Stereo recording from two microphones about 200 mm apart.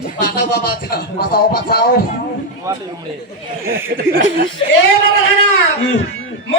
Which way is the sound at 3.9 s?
45° right (ahead or behind).